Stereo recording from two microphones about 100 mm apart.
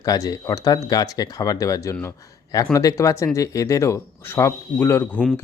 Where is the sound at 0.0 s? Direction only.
40° left (ahead or behind).